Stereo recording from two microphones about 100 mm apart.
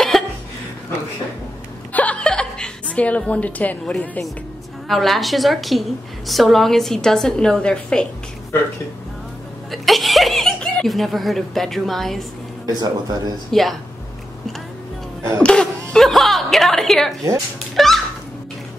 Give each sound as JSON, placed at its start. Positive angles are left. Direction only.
{"t": 2.0, "sound": "music", "side_deg": 10}
{"t": 4.8, "sound": "a woman's voice", "side_deg": 0}
{"t": 9.7, "sound": "speech", "side_deg": 0}
{"t": 12.6, "sound": "a man's voice", "side_deg": -40}
{"t": 13.5, "sound": "a woman's voice", "side_deg": 0}
{"t": 15.4, "sound": "chuckle", "side_deg": 5}
{"t": 17.7, "sound": "a woman's voice", "side_deg": 0}